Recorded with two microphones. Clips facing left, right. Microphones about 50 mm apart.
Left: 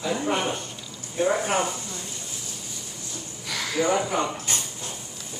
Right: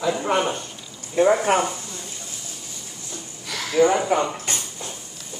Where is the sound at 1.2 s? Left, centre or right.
Right.